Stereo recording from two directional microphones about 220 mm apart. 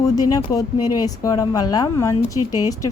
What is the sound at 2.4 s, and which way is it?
Speech, 90° left.